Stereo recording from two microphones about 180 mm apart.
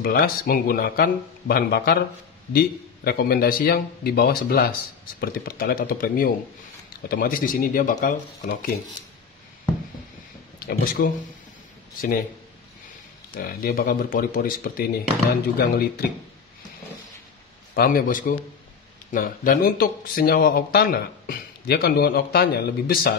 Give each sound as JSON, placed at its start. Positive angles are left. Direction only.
{"t": 0.0, "sound": "speech", "side_deg": 55}
{"t": 10.6, "sound": "speech", "side_deg": 55}
{"t": 13.3, "sound": "speech", "side_deg": 55}
{"t": 17.7, "sound": "speech", "side_deg": 55}